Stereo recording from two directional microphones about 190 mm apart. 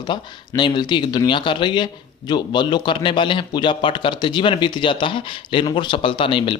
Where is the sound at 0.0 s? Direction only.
25° left (ahead or behind).